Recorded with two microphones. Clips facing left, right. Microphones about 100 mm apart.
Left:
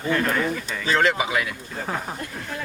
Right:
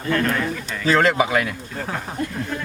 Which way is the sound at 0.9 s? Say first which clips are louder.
Right 4 dB; 40° right (ahead or behind).